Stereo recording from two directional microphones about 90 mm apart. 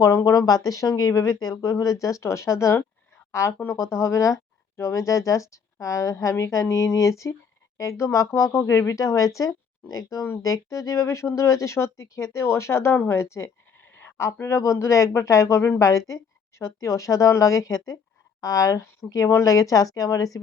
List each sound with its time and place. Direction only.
0.0 s speech: 35° left (ahead or behind)